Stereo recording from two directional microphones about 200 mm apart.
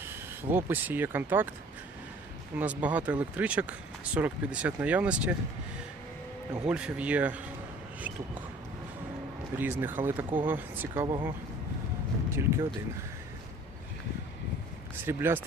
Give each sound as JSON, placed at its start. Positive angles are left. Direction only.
{"t": 0.0, "sound": "speech", "side_deg": -10}
{"t": 2.6, "sound": "speech", "side_deg": -5}
{"t": 6.7, "sound": "speech", "side_deg": -5}
{"t": 9.6, "sound": "speech", "side_deg": -10}
{"t": 11.0, "sound": "speech", "side_deg": -20}
{"t": 12.3, "sound": "speech", "side_deg": -15}
{"t": 15.0, "sound": "speech", "side_deg": -10}